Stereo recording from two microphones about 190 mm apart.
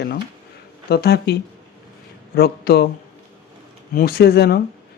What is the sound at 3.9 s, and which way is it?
Speech, 55° left (ahead or behind).